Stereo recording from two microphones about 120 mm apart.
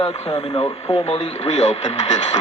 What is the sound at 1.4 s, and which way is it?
Speech, 75° left (ahead or behind).